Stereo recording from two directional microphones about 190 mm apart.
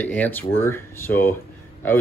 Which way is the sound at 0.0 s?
10° left (ahead or behind).